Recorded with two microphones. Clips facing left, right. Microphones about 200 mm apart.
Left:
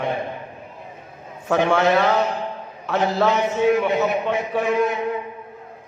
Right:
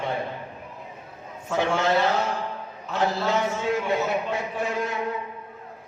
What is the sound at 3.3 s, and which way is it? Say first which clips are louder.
A man's voice: left 6 dB; 20° left (ahead or behind).